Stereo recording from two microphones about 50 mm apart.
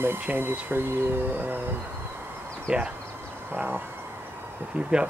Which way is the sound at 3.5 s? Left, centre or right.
Right.